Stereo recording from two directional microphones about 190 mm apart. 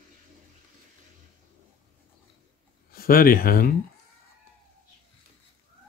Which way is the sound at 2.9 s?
50° left (ahead or behind).